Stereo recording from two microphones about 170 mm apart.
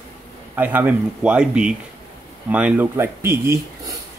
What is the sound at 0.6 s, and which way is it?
Speech, 10° right (ahead or behind).